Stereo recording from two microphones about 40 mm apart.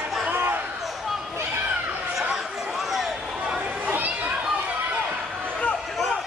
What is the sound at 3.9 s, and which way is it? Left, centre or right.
Children playing, right.